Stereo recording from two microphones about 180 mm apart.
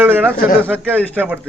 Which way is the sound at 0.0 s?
10° right (ahead or behind).